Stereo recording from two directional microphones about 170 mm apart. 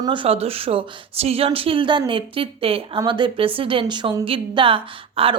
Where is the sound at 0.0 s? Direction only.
30° right (ahead or behind).